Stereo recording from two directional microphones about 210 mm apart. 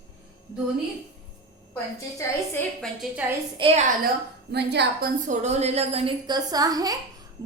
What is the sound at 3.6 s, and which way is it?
Speech, 25° right (ahead or behind).